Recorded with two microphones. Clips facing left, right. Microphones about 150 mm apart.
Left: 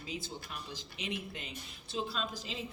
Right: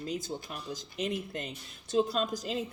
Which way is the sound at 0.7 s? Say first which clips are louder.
Right 8 dB; 45° right (ahead or behind).